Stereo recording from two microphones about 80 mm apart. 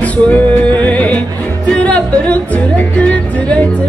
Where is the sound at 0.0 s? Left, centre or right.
Centre.